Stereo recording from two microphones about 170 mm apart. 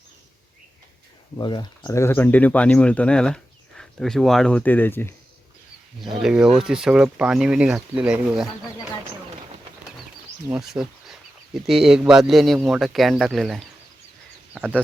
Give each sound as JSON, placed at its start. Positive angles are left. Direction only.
{"t": 1.4, "sound": "speech", "side_deg": 25}
{"t": 6.0, "sound": "speech", "side_deg": 0}
{"t": 10.5, "sound": "speech", "side_deg": 0}